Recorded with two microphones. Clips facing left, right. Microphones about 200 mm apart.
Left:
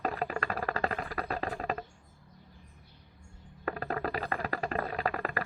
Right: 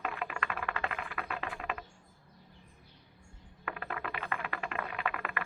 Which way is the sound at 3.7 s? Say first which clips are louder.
Left 6 dB; 40° left (ahead or behind).